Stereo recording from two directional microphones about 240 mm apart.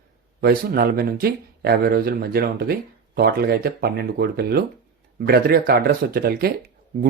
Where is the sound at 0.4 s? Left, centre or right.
Right.